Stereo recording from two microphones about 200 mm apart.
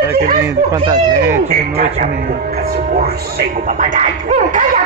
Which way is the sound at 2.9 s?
50° right (ahead or behind).